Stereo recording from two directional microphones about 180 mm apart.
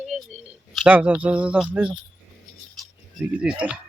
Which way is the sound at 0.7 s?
5° right (ahead or behind).